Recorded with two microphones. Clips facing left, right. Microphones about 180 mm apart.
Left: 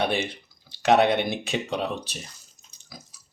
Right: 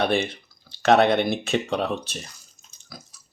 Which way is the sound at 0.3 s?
15° left (ahead or behind).